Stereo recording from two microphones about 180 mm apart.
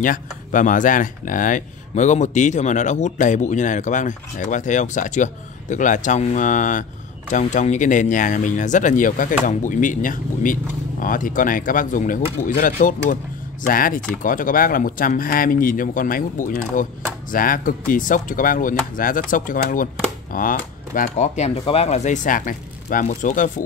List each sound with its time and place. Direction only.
0.0 s speech: 45° left (ahead or behind)